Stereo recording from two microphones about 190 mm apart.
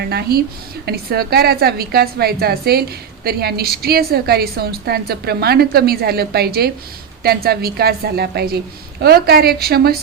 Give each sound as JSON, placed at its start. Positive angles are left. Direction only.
{"t": 0.0, "sound": "a woman's voice", "side_deg": -55}